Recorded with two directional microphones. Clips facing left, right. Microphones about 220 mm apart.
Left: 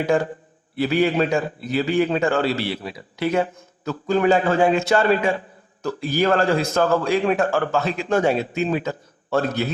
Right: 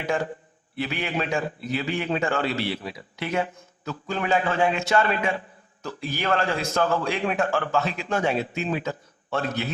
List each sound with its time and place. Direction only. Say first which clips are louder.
0.8 s a man's voice: left 9 dB; 40° left (ahead or behind)